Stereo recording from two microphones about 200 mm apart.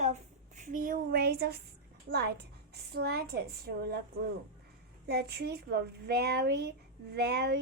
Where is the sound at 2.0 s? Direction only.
55° right (ahead or behind).